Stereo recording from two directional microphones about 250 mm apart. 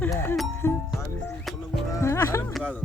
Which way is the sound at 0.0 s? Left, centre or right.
Centre.